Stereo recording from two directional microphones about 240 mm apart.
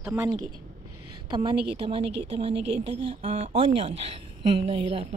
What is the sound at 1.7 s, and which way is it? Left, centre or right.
A woman's voice, right.